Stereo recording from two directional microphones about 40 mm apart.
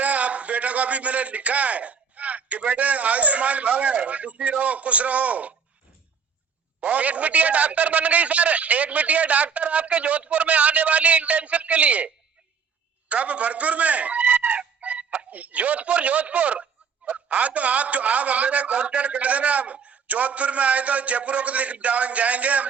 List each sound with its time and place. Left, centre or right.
0.0 s a man's voice: right
6.7 s a man's voice: right
13.1 s fowl: right
15.3 s a man's voice: right